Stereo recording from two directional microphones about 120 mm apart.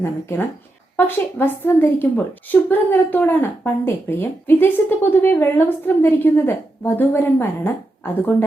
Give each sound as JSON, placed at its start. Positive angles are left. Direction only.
{"t": 0.0, "sound": "a woman's voice", "side_deg": 20}